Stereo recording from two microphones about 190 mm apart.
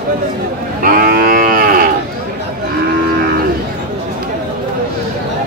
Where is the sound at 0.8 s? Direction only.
50° right (ahead or behind).